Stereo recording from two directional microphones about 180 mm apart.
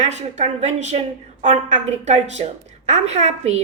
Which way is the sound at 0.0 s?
40° right (ahead or behind).